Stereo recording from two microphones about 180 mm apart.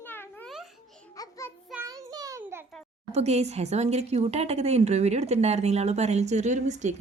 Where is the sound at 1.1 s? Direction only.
20° left (ahead or behind).